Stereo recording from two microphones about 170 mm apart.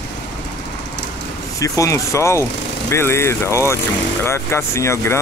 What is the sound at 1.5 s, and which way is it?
Speech, 20° left (ahead or behind).